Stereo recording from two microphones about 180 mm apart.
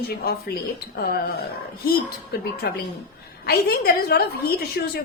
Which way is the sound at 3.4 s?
60° left (ahead or behind).